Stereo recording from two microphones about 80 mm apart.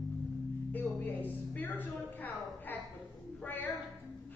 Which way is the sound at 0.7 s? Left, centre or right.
Left.